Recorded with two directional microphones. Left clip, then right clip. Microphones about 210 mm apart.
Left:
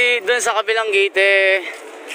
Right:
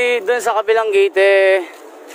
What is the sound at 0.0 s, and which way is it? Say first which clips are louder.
Speech: even; 15° right (ahead or behind).